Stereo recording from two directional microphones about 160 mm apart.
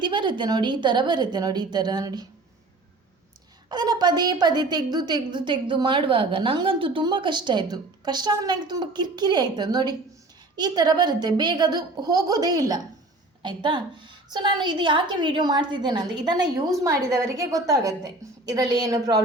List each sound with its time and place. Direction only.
0.0 s a woman's voice: 30° right (ahead or behind)
3.7 s a woman's voice: 25° right (ahead or behind)